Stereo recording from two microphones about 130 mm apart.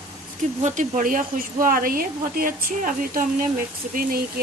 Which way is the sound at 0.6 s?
70° right (ahead or behind).